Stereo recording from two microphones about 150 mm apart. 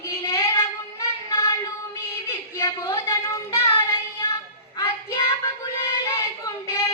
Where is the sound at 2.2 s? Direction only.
20° left (ahead or behind).